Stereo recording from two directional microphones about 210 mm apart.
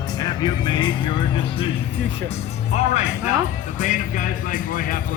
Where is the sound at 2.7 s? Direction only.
35° left (ahead or behind).